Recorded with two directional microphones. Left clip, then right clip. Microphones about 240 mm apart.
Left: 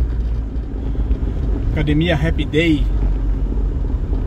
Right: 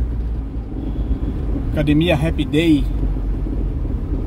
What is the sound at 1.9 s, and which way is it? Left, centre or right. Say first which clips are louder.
Speech: right 1 dB; right.